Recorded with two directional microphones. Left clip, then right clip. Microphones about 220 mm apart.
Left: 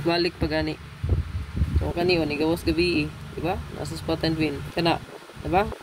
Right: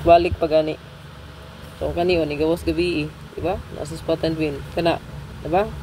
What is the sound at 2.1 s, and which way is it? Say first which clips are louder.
Speech: right 2 dB; 30° left (ahead or behind).